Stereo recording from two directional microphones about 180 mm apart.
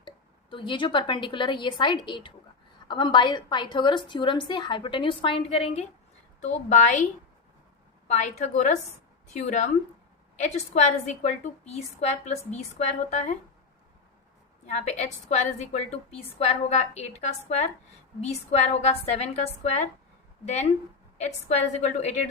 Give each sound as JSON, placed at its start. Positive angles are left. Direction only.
{"t": 0.5, "sound": "a woman's voice", "side_deg": 25}
{"t": 8.0, "sound": "a woman's voice", "side_deg": 40}
{"t": 14.7, "sound": "a woman's voice", "side_deg": 40}